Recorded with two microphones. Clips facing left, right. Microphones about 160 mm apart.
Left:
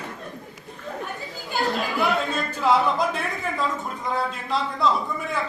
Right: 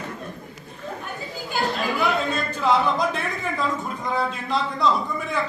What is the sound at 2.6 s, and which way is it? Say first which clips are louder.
A man's voice: left 1 dB; 5° left (ahead or behind).